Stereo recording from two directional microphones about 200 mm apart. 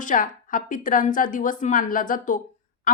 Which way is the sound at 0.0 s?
40° left (ahead or behind).